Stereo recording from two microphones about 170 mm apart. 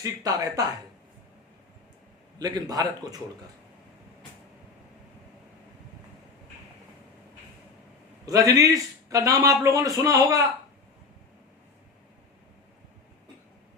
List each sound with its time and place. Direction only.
0.0 s a man's voice: 20° right (ahead or behind)
2.4 s a man's voice: 20° right (ahead or behind)
8.3 s a man's voice: 20° right (ahead or behind)